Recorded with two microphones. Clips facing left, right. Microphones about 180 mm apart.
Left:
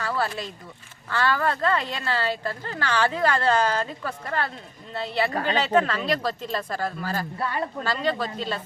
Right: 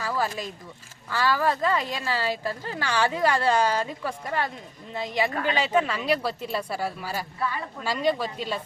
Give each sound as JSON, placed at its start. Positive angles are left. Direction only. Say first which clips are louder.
{"t": 0.0, "sound": "speech", "louder": "left 1 dB", "side_deg": -10}
{"t": 5.3, "sound": "speech", "louder": "left 1 dB", "side_deg": 40}
{"t": 5.5, "sound": "speech", "louder": "left 3 dB", "side_deg": -10}